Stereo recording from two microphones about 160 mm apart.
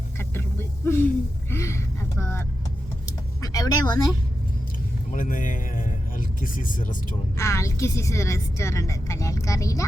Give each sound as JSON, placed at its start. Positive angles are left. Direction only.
{"t": 0.2, "sound": "vehicle", "side_deg": 15}
{"t": 1.5, "sound": "a sound", "side_deg": 15}
{"t": 5.1, "sound": "speech", "side_deg": 55}
{"t": 7.3, "sound": "a woman's voice", "side_deg": 20}